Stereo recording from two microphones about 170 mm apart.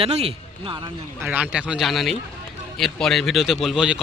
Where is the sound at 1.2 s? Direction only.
10° right (ahead or behind).